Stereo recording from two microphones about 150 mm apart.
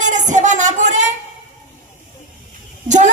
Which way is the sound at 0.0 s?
55° right (ahead or behind).